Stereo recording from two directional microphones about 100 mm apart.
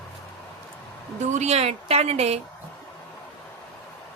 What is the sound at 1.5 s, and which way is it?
Speech, 90° right.